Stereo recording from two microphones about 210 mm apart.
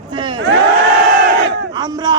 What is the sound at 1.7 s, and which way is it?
Speech, 20° right (ahead or behind).